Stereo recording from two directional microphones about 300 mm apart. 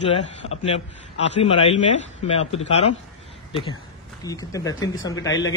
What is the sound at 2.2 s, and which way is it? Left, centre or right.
Speech, centre.